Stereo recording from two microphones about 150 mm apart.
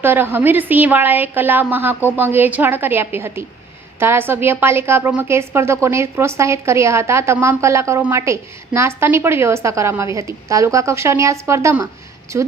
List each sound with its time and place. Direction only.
0.0 s a woman's voice: 15° right (ahead or behind)